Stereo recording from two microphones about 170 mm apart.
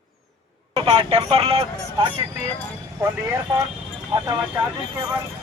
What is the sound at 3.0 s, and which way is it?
Speech, 15° right (ahead or behind).